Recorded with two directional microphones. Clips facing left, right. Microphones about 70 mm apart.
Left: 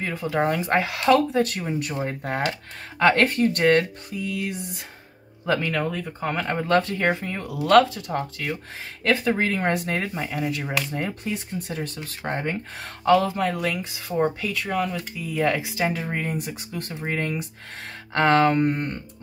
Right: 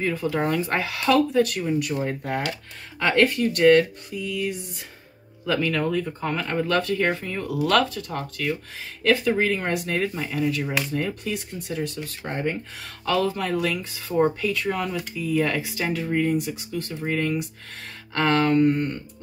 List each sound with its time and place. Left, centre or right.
0.0 s speech: left
3.0 s speech: left
5.4 s speech: left
5.8 s speech: centre
6.3 s speech: left
9.0 s speech: left
10.3 s speech: centre
14.1 s speech: centre
15.3 s speech: centre
16.1 s speech: left